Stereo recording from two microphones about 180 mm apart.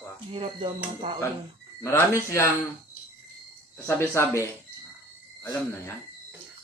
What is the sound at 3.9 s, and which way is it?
Speech, 15° left (ahead or behind).